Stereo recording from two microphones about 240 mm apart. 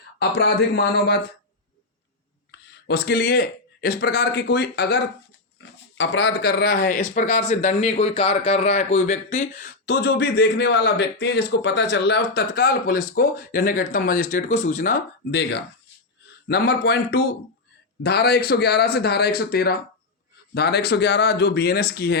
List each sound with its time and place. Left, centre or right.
0.2 s speech: left
2.5 s speech: left